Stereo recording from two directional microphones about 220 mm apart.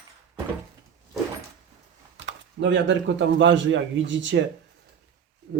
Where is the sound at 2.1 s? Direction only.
55° right (ahead or behind).